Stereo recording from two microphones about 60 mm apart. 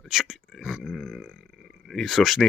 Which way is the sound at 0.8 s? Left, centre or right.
Centre.